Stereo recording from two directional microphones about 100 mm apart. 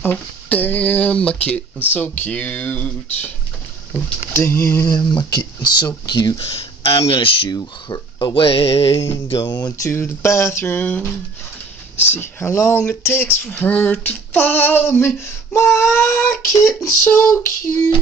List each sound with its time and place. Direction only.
0.0 s speech: 20° left (ahead or behind)
4.3 s female singing: 25° left (ahead or behind)
5.3 s speech: 45° left (ahead or behind)
6.4 s speech: 70° left (ahead or behind)
7.5 s speech: 45° left (ahead or behind)
8.4 s speech: 65° left (ahead or behind)
9.8 s female singing: 25° left (ahead or behind)
16.5 s a sound: 30° left (ahead or behind)
17.0 s female singing: 25° left (ahead or behind)